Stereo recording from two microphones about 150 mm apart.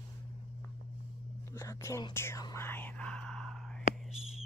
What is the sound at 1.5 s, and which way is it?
Whispering, 20° left (ahead or behind).